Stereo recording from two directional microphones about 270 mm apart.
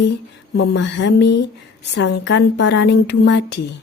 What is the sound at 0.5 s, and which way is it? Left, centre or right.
Speech, left.